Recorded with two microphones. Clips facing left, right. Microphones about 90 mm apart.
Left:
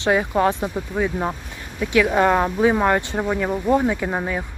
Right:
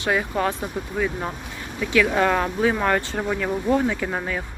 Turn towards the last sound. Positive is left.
turn(degrees=15)  # may be behind; listen again after turning